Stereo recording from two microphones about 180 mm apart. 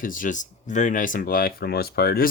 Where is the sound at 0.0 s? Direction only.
45° left (ahead or behind).